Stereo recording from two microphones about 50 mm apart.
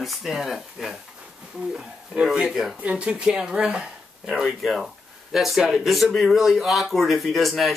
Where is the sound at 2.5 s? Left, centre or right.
Centre.